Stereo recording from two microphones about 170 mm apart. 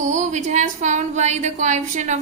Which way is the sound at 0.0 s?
45° right (ahead or behind).